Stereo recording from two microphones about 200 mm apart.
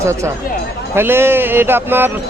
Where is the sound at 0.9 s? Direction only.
10° right (ahead or behind).